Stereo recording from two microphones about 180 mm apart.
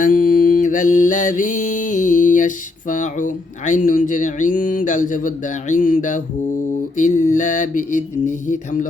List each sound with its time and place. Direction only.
0.0 s mantra: 50° left (ahead or behind)
2.9 s speech: 45° left (ahead or behind)